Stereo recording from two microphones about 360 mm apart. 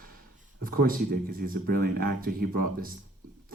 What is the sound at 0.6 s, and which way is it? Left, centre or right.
Speech, right.